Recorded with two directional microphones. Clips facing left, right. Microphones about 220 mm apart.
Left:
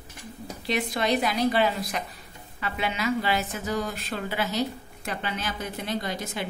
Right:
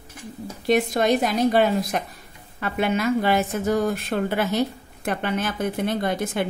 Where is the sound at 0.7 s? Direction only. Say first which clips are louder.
Right 6 dB; 45° right (ahead or behind).